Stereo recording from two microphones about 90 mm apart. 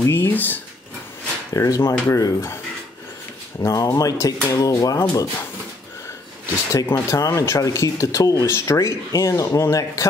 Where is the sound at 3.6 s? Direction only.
40° left (ahead or behind).